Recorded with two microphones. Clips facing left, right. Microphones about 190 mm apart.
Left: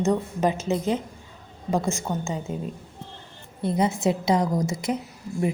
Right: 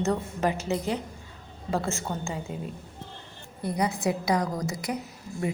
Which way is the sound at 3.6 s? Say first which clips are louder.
Left 4 dB; 25° left (ahead or behind).